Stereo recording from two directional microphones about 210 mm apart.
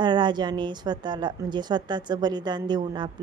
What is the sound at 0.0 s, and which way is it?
A woman's voice, 20° right (ahead or behind).